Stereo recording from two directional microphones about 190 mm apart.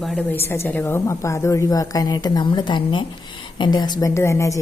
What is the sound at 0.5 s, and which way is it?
A woman's voice, 10° left (ahead or behind).